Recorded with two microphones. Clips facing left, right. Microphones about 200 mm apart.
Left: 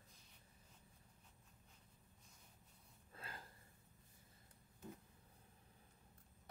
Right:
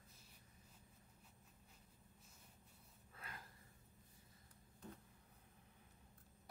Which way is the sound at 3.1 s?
30° left (ahead or behind).